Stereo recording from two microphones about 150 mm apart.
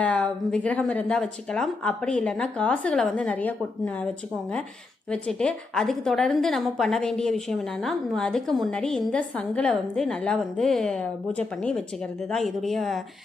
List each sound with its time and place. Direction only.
0.0 s speech: 5° left (ahead or behind)
5.1 s a woman's voice: 5° left (ahead or behind)